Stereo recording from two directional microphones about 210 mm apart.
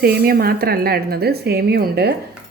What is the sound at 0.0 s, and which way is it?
Speech, 45° right (ahead or behind).